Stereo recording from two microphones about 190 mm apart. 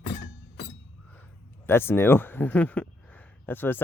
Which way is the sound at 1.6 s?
10° left (ahead or behind).